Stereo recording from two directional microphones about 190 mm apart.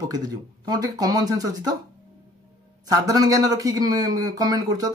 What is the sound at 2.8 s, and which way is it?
Speech, 20° right (ahead or behind).